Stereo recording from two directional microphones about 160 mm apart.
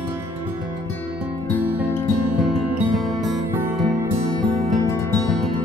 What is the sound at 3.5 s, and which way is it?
Music, 15° right (ahead or behind).